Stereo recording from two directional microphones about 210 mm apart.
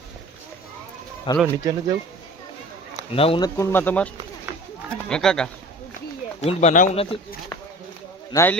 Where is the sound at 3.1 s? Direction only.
25° left (ahead or behind).